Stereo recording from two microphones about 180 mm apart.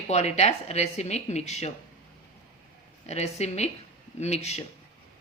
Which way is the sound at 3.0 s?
35° left (ahead or behind).